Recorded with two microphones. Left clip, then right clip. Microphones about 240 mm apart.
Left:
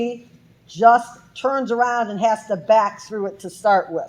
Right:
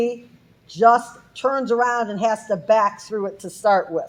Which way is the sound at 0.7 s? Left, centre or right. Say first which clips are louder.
Left 1 dB; right.